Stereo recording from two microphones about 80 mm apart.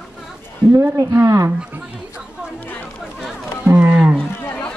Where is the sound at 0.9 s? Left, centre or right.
Right.